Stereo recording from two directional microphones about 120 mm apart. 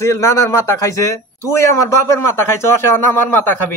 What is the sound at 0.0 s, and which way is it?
Speech, 25° left (ahead or behind).